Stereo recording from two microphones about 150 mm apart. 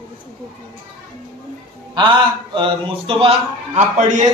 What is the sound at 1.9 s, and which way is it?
A man's voice, 30° right (ahead or behind).